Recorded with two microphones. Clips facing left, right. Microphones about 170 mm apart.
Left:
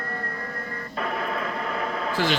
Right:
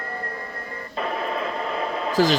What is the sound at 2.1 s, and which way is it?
Speech, 40° right (ahead or behind).